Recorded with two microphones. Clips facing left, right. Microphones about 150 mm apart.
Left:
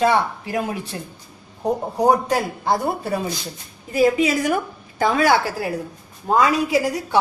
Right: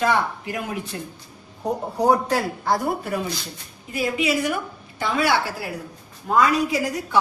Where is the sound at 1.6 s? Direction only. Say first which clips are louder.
Left 2 dB; 20° left (ahead or behind).